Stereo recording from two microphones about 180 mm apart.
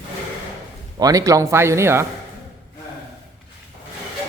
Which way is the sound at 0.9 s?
20° right (ahead or behind).